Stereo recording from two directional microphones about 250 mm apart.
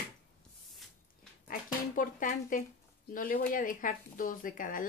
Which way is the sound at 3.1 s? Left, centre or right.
Left.